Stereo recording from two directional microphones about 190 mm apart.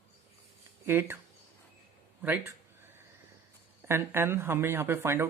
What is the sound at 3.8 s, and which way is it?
Speech, 10° right (ahead or behind).